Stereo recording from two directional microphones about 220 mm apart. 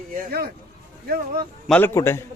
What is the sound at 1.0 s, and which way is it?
Music, 45° right (ahead or behind).